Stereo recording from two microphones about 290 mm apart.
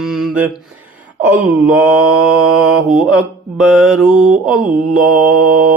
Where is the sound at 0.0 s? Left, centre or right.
Centre.